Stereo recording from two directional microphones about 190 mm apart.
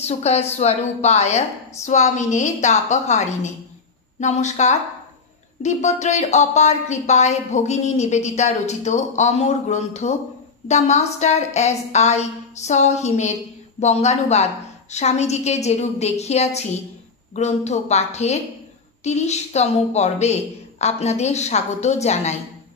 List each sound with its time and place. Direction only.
0.0 s speech: 35° left (ahead or behind)